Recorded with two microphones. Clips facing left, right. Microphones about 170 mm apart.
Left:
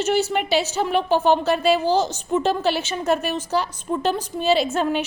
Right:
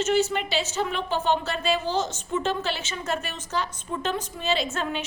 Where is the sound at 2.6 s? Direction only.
65° left (ahead or behind).